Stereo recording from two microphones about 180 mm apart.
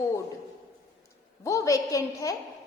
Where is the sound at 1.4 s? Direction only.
15° left (ahead or behind).